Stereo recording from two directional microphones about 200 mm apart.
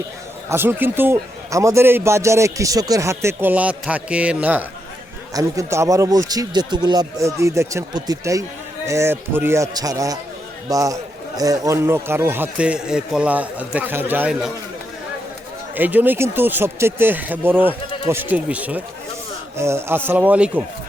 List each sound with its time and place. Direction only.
0.5 s a man's voice: 10° right (ahead or behind)
15.7 s a man's voice: 10° right (ahead or behind)